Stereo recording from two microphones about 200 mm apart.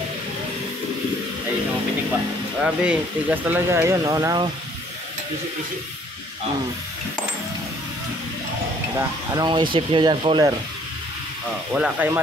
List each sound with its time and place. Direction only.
2.6 s speech: 5° right (ahead or behind)
8.9 s speech: 20° right (ahead or behind)
11.7 s speech: 5° right (ahead or behind)